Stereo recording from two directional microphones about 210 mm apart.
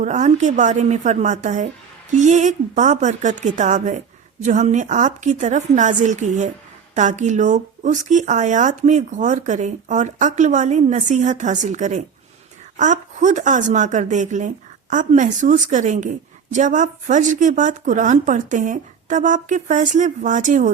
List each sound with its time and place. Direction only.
0.0 s speech: 35° right (ahead or behind)